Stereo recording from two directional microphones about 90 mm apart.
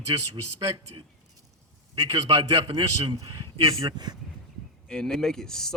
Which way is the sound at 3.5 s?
90° right.